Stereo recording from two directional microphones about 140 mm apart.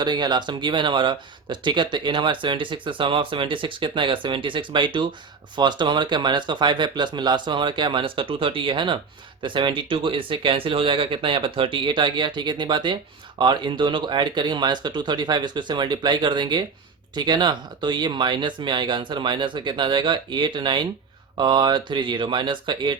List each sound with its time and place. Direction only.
0.0 s speech: 30° right (ahead or behind)